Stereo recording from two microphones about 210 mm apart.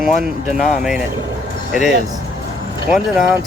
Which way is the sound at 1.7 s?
Centre (ahead or behind).